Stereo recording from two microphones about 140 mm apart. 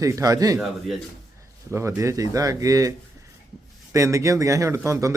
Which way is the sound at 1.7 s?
20° right (ahead or behind).